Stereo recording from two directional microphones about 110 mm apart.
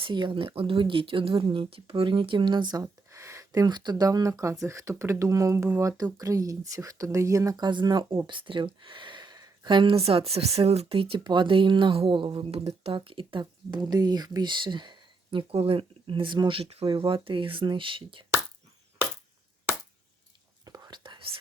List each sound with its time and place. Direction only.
0.0 s speech: 45° right (ahead or behind)
2.8 s speech: 30° right (ahead or behind); by 11.2 s 55° right (ahead or behind)
11.2 s speech: 45° right (ahead or behind)
15.5 s speech: 60° right (ahead or behind)
20.7 s whispering: 35° right (ahead or behind)